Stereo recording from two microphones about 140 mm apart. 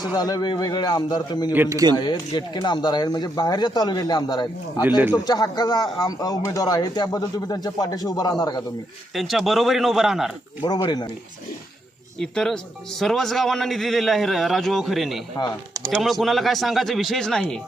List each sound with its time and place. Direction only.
0.2 s speech: 30° left (ahead or behind)
1.5 s speech: 20° right (ahead or behind)
2.0 s speech: 35° left (ahead or behind)
9.1 s a man's voice: centre (ahead or behind)
10.6 s speech: 30° left (ahead or behind)
12.2 s a man's voice: 5° left (ahead or behind)